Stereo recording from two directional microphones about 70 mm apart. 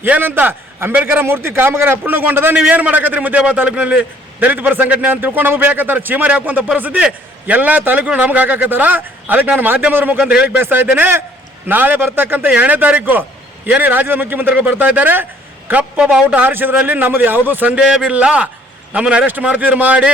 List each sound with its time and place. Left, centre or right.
0.0 s a man's voice: right
2.6 s a man's voice: centre
10.6 s a man's voice: right
15.8 s a man's voice: centre
17.7 s a man's voice: centre